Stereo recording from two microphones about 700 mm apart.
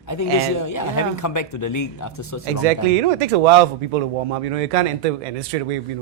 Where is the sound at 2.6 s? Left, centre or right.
Right.